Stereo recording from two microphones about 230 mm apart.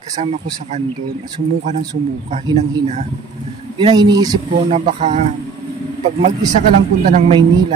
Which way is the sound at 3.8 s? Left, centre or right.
Centre.